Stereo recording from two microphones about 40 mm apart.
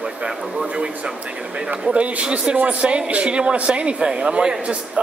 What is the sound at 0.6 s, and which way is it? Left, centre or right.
A man's voice, right.